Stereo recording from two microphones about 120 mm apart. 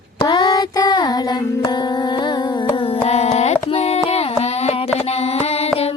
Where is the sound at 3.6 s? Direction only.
60° left (ahead or behind).